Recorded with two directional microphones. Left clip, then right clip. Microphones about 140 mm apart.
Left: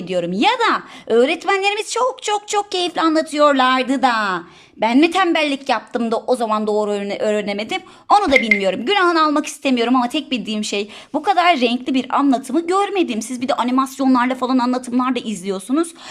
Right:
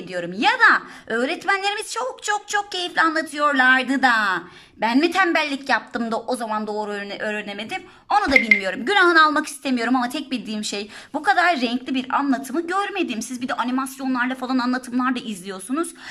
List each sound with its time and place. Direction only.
0.1 s a woman's voice: 25° left (ahead or behind)
8.3 s speech: centre (ahead or behind)
8.6 s a woman's voice: 25° left (ahead or behind); by 14.3 s 40° left (ahead or behind)
14.4 s a woman's voice: 25° left (ahead or behind)